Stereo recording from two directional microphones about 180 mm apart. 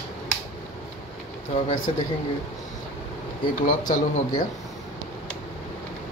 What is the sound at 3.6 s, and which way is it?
Speech, 45° left (ahead or behind).